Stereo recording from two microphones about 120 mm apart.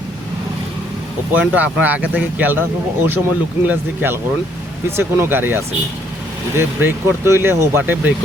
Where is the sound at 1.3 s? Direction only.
15° right (ahead or behind).